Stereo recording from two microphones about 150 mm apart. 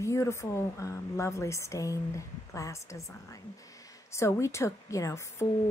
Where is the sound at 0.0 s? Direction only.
20° left (ahead or behind).